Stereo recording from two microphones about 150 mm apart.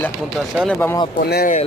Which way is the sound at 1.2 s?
90° left.